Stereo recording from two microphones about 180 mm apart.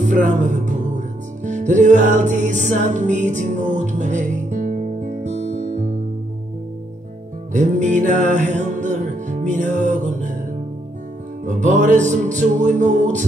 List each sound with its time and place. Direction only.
0.0 s music: 45° right (ahead or behind)
7.5 s music: 45° right (ahead or behind)
11.4 s music: 45° right (ahead or behind)